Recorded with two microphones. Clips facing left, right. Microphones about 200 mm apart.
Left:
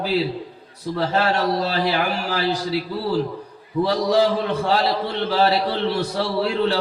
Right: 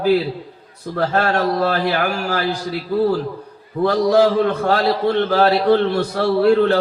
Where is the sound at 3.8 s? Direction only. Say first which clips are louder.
Right 4 dB; 50° right (ahead or behind).